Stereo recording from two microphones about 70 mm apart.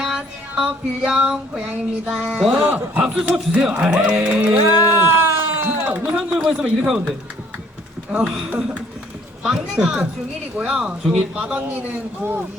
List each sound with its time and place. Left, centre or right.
0.0 s music: centre
2.6 s a man's voice: right
3.0 s speech: centre
4.6 s a sound: right
6.1 s speech: centre
8.3 s a man's voice: centre